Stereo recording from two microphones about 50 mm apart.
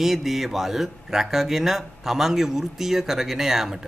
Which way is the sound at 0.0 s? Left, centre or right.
Centre.